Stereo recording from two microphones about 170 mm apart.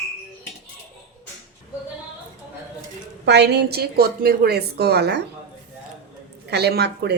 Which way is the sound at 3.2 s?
80° right.